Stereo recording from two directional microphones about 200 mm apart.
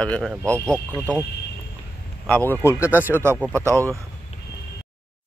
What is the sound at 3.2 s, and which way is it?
Speech, 15° right (ahead or behind).